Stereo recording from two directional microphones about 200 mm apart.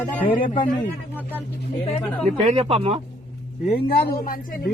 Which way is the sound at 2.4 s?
30° right (ahead or behind).